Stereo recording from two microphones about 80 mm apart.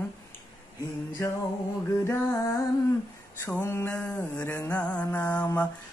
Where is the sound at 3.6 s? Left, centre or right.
Left.